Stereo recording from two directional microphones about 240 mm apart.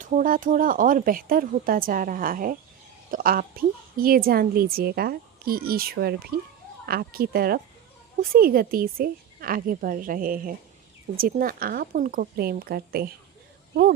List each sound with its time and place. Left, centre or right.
0.0 s a woman's voice: right